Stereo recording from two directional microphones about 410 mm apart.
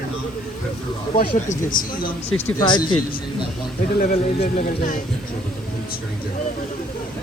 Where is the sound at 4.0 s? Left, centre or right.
Left.